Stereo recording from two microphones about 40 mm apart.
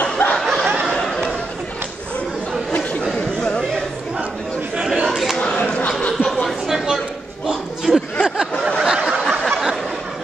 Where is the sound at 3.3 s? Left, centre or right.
Left.